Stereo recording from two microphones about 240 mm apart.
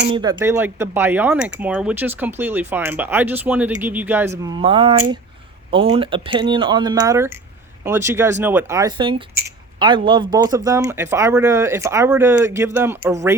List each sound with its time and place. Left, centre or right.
0.2 s speech: centre
9.3 s a sound: centre
10.3 s speech: centre